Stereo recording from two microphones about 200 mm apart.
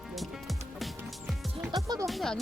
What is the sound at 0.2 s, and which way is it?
Music, centre (ahead or behind).